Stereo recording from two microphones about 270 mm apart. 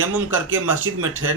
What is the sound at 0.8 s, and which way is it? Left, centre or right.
Speech, right.